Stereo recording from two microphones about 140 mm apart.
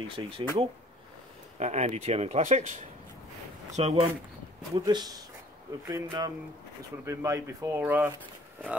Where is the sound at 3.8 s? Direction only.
50° right (ahead or behind).